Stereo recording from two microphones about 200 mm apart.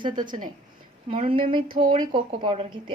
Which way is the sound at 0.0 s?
25° right (ahead or behind).